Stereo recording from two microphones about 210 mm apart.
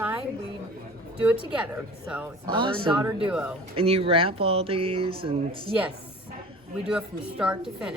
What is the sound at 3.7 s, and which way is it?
Speech, 25° right (ahead or behind).